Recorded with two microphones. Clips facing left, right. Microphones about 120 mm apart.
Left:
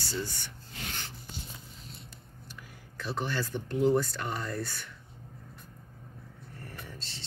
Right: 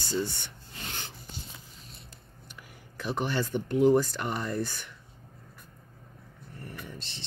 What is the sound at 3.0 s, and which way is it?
Speech, 15° right (ahead or behind).